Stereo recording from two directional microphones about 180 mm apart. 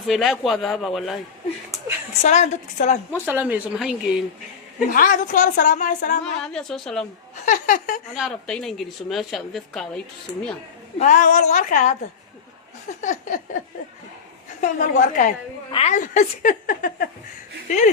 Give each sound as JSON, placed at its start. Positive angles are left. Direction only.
{"t": 0.1, "sound": "a woman's voice", "side_deg": 0}
{"t": 2.2, "sound": "a woman's voice", "side_deg": 40}
{"t": 3.1, "sound": "speech", "side_deg": -10}
{"t": 4.9, "sound": "a woman's voice", "side_deg": 45}
{"t": 6.4, "sound": "a woman's voice", "side_deg": 5}
{"t": 7.4, "sound": "a woman's voice", "side_deg": 45}
{"t": 8.1, "sound": "a woman's voice", "side_deg": 0}
{"t": 10.9, "sound": "a woman's voice", "side_deg": 40}
{"t": 13.0, "sound": "a woman's voice", "side_deg": 45}
{"t": 14.6, "sound": "a woman's voice", "side_deg": 45}